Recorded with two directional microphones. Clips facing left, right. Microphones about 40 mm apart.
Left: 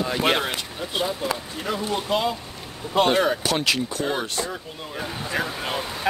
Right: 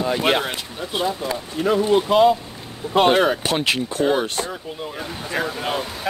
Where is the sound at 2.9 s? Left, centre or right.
Right.